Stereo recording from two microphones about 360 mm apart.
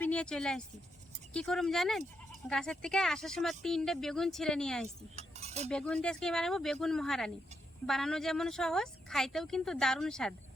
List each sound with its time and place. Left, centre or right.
0.0 s speech: centre
5.1 s cutlery: centre
5.6 s speech: centre